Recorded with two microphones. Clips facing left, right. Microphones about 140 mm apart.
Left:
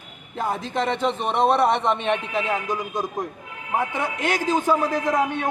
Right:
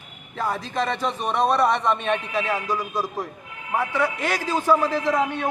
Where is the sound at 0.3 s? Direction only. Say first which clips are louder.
Left 1 dB; 20° left (ahead or behind).